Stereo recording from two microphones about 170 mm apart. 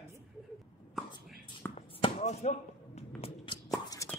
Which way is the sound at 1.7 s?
35° left (ahead or behind).